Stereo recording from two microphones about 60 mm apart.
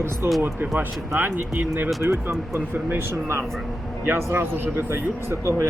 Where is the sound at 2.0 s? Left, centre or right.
Right.